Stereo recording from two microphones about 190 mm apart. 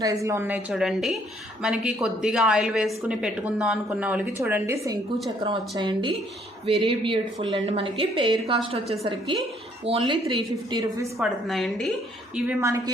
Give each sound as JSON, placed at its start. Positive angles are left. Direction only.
{"t": 0.0, "sound": "a woman's voice", "side_deg": -15}
{"t": 5.4, "sound": "speech", "side_deg": -25}
{"t": 11.2, "sound": "a woman's voice", "side_deg": 0}
{"t": 12.3, "sound": "a woman's voice", "side_deg": -10}